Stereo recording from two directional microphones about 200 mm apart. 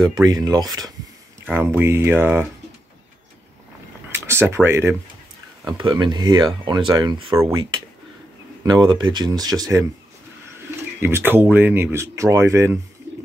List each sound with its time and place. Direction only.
0.0 s speech: 20° right (ahead or behind)
4.1 s speech: 10° right (ahead or behind)
5.8 s speech: 25° right (ahead or behind)
11.0 s speech: 10° right (ahead or behind)